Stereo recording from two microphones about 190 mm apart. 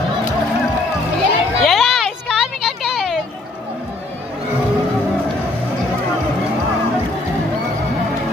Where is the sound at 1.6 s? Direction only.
Centre (ahead or behind).